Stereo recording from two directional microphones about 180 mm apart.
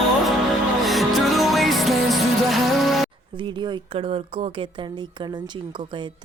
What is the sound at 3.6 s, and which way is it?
Speech, 30° right (ahead or behind).